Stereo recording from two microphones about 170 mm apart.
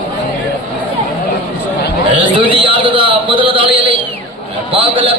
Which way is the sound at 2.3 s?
30° right (ahead or behind).